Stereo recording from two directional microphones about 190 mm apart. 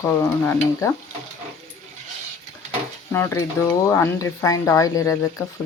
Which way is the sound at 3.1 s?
15° left (ahead or behind).